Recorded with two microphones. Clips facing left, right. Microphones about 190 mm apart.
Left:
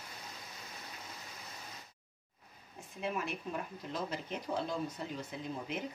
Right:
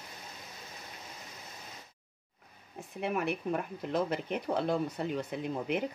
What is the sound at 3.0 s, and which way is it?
Speech, 60° right (ahead or behind).